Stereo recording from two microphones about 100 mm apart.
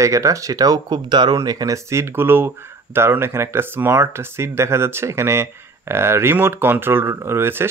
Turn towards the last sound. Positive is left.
turn(degrees=-25)  # may be behind; listen again after turning